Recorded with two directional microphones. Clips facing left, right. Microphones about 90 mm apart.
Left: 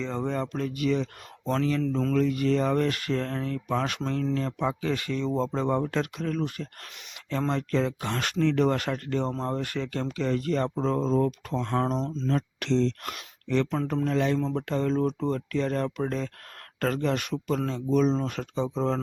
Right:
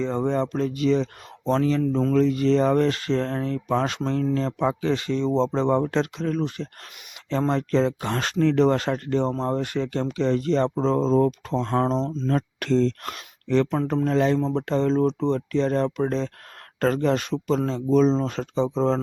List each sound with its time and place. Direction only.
0.0 s speech: 20° right (ahead or behind)
12.3 s speech: 45° right (ahead or behind)